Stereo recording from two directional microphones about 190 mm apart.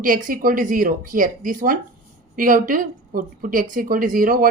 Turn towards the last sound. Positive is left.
turn(degrees=-50)  # may be behind; listen again after turning